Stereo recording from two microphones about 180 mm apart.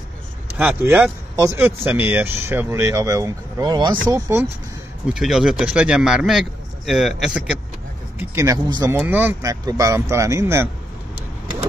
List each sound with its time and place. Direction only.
0.6 s speech: 10° right (ahead or behind)
5.1 s speech: centre (ahead or behind)
8.2 s speech: 15° right (ahead or behind)
8.9 s speech: 10° right (ahead or behind)